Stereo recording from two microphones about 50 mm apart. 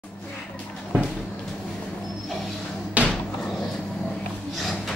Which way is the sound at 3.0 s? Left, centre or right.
Right.